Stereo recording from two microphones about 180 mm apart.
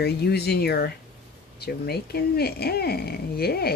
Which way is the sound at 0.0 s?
60° left (ahead or behind).